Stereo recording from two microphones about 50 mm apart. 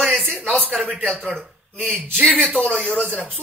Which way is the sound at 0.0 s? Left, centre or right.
Centre.